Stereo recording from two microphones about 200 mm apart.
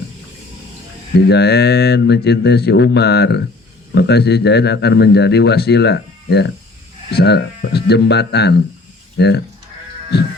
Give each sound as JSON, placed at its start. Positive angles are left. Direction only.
{"t": 1.1, "sound": "speech", "side_deg": 55}
{"t": 10.1, "sound": "music", "side_deg": 55}